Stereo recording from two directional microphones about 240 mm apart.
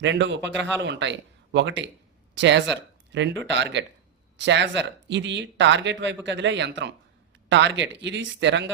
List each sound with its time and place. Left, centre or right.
0.0 s speech: right